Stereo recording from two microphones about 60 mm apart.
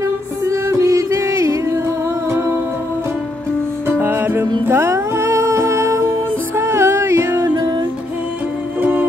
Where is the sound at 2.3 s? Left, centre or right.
Right.